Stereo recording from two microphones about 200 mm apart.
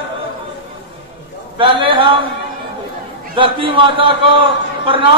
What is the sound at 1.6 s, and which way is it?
Speech, 25° right (ahead or behind).